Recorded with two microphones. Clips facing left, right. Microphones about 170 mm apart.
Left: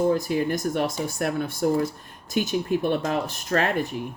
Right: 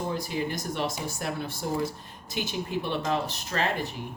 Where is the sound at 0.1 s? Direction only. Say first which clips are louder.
Left 7 dB; 50° left (ahead or behind).